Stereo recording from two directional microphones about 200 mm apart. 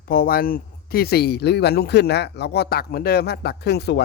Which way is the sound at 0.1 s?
45° left (ahead or behind).